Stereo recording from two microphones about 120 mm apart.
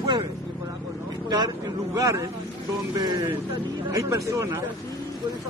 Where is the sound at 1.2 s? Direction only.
35° right (ahead or behind).